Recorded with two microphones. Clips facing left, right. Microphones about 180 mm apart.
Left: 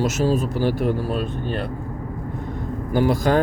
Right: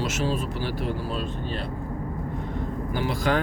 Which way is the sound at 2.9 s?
45° left (ahead or behind).